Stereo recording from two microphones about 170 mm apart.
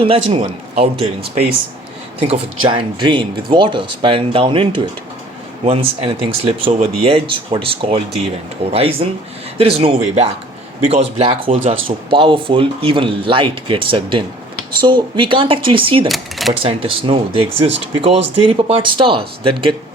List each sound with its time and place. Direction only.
0.0 s speech: 35° right (ahead or behind)
16.0 s cash register: centre (ahead or behind)
16.6 s speech: 30° right (ahead or behind)